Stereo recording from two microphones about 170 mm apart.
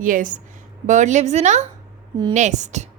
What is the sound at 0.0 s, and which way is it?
A woman's voice, 50° right (ahead or behind).